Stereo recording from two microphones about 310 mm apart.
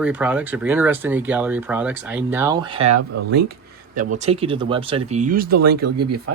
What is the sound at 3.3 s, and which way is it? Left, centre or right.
Speech, right.